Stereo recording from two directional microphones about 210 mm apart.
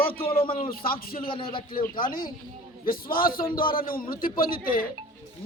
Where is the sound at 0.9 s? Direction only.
45° left (ahead or behind).